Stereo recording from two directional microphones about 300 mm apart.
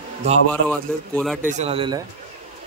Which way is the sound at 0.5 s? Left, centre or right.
Centre.